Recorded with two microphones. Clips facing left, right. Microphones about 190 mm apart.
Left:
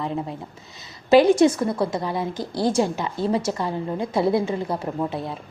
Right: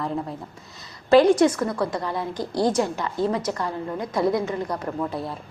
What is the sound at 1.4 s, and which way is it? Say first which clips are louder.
A woman's voice: left 2 dB; 25° left (ahead or behind).